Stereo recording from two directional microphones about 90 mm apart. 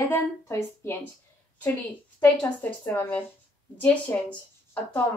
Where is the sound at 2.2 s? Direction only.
20° left (ahead or behind).